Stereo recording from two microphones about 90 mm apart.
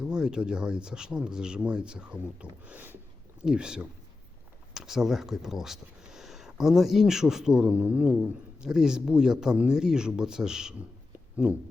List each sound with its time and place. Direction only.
0.0 s speech: 10° right (ahead or behind)
3.4 s speech: 10° right (ahead or behind)